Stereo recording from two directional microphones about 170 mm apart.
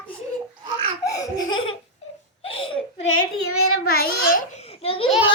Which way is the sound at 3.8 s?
65° left (ahead or behind).